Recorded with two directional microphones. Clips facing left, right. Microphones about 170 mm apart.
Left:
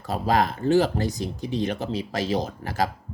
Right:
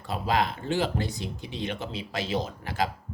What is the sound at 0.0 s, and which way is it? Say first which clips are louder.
Speech: left 4 dB; 40° left (ahead or behind).